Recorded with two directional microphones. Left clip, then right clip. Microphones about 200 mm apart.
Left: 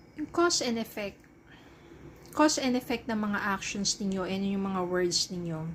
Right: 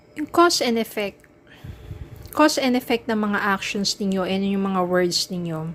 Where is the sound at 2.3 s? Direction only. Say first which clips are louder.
Right 8 dB; 30° right (ahead or behind).